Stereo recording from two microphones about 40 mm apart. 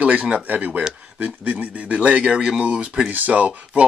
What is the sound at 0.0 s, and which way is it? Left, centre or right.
Speech, right.